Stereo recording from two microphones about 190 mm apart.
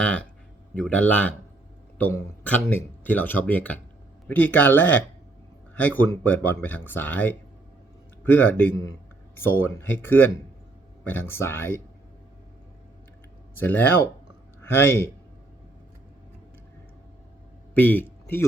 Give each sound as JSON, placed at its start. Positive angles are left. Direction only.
{"t": 0.0, "sound": "speech", "side_deg": 5}
{"t": 13.6, "sound": "speech", "side_deg": 10}
{"t": 17.7, "sound": "a man's voice", "side_deg": 10}